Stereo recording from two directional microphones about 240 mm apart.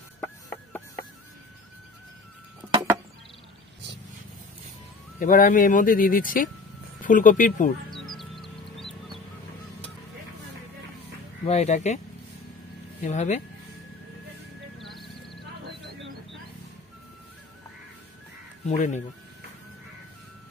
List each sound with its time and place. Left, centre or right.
0.2 s music: centre
5.2 s speech: left
7.9 s music: centre
11.4 s speech: left
13.0 s speech: left
14.8 s horse: centre
18.7 s speech: left